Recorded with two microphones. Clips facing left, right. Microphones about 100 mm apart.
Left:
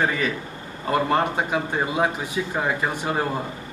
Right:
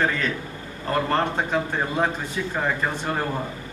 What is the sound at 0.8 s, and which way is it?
A man's voice, 10° left (ahead or behind).